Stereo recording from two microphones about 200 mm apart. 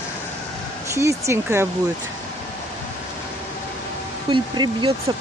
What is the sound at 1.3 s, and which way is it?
Speech, 10° right (ahead or behind).